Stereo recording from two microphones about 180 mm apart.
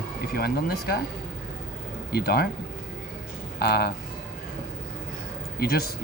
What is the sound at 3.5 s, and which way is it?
Speech, 65° left (ahead or behind).